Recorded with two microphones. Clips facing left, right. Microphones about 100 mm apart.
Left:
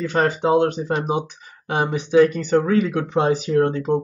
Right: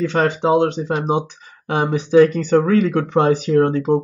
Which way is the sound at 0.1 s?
25° right (ahead or behind).